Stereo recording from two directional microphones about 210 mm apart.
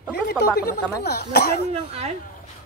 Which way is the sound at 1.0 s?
50° left (ahead or behind).